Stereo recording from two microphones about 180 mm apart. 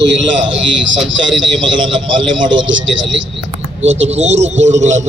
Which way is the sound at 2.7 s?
90° right.